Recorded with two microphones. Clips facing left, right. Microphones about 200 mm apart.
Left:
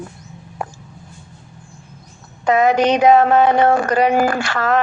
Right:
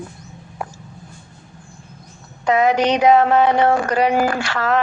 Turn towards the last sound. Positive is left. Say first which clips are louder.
# left 1 dB
turn(degrees=50)  # may be behind; listen again after turning